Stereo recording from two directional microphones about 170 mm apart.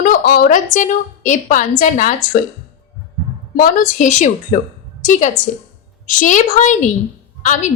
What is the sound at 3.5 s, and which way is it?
A woman's voice, 50° left (ahead or behind).